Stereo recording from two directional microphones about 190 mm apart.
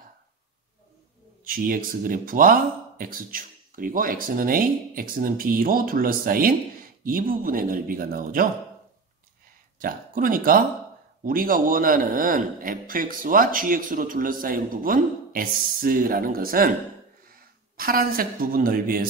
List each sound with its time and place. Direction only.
1.4 s a man's voice: 50° right (ahead or behind)
9.8 s a man's voice: 50° right (ahead or behind)